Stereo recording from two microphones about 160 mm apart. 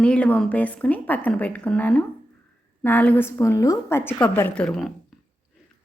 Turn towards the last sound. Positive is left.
turn(degrees=0)  # may be behind; listen again after turning